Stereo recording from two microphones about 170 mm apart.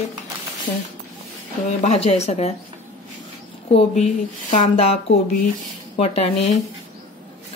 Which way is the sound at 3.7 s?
40° left (ahead or behind).